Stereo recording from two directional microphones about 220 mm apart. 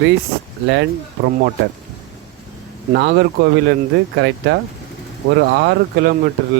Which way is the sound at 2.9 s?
50° right (ahead or behind).